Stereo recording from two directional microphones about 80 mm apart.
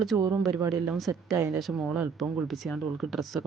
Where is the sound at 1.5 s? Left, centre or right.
Centre.